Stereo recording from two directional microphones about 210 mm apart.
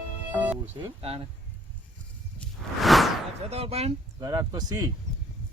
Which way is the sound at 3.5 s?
30° right (ahead or behind).